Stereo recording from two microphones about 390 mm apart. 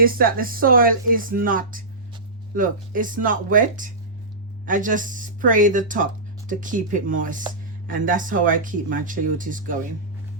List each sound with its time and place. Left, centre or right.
0.0 s speech: right